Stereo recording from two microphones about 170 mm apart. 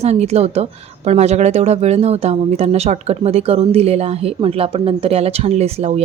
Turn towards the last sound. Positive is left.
turn(degrees=-40)  # may be behind; listen again after turning